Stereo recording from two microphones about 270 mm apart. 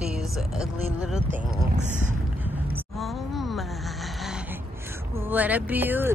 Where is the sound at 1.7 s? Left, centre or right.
Right.